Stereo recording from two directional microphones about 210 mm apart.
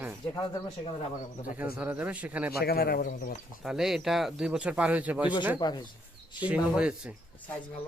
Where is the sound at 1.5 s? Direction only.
10° right (ahead or behind).